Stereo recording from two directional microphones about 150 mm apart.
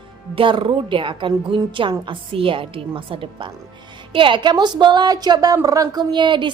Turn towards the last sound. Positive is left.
turn(degrees=-30)  # may be behind; listen again after turning